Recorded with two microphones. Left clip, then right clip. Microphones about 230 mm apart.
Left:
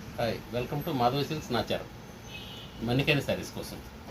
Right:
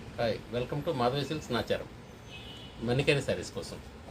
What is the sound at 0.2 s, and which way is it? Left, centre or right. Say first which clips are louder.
Speech: even; right.